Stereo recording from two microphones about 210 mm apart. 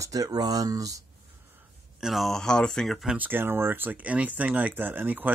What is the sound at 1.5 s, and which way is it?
Speech, centre (ahead or behind).